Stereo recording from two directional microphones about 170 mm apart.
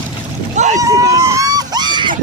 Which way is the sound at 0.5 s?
45° right (ahead or behind).